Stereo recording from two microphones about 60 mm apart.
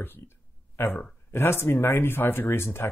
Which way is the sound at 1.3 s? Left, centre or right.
Left.